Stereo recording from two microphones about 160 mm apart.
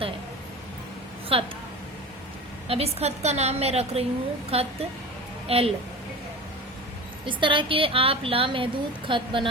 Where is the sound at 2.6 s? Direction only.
40° right (ahead or behind).